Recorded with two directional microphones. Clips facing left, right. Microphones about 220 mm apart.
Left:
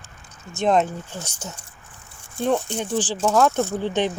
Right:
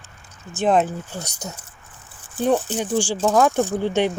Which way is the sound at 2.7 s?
5° right (ahead or behind).